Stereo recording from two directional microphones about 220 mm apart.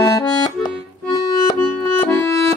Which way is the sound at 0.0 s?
15° left (ahead or behind).